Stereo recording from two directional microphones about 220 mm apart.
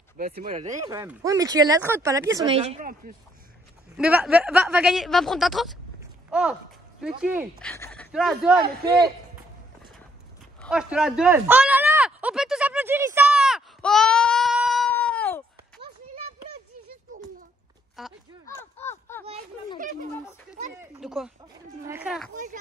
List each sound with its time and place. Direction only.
0.4 s speech: 35° right (ahead or behind)
0.8 s speech: 15° right (ahead or behind)
2.5 s speech: 30° right (ahead or behind)
3.9 s speech: 5° right (ahead or behind)
7.2 s speech: 5° right (ahead or behind)
7.6 s speech: 10° left (ahead or behind)
10.6 s a sound: 5° right (ahead or behind)
18.0 s speech: centre (ahead or behind)
18.5 s a sound: 10° left (ahead or behind)
19.8 s speech: 40° right (ahead or behind)
20.7 s speech: 10° right (ahead or behind)
22.3 s speech: 35° right (ahead or behind)